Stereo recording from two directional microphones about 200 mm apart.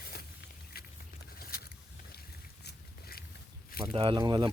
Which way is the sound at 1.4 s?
50° left (ahead or behind).